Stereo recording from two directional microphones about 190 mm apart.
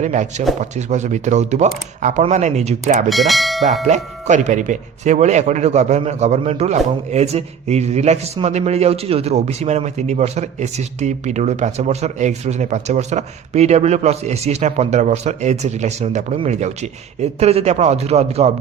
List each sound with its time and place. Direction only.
0.0 s speech: 40° right (ahead or behind)
3.1 s speech: centre (ahead or behind)
3.8 s speech: 40° right (ahead or behind)